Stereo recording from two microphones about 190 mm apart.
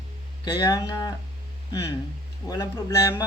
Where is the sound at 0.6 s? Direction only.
20° left (ahead or behind).